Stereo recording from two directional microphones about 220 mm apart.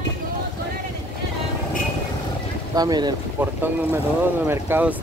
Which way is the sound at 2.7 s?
15° right (ahead or behind).